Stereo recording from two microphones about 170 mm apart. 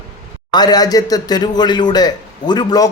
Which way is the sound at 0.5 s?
25° left (ahead or behind).